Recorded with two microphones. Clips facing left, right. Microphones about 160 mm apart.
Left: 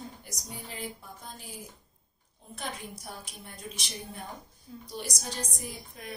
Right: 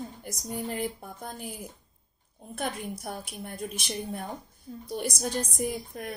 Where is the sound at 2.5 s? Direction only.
55° right (ahead or behind).